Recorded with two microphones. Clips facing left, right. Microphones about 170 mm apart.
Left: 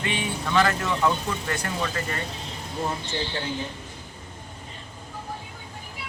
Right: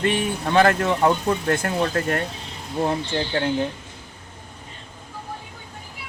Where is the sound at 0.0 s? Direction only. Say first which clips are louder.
Right 6 dB; 50° right (ahead or behind).